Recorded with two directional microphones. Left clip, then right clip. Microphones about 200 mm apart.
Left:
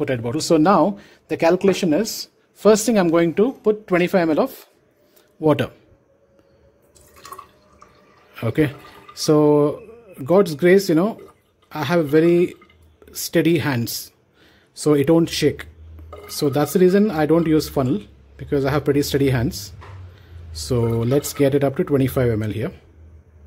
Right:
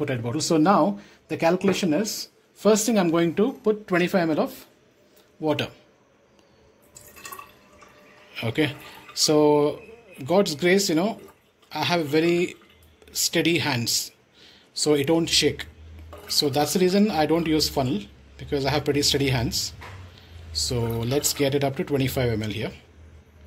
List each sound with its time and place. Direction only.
0.0 s speech: 55° left (ahead or behind)
8.4 s speech: 40° left (ahead or behind)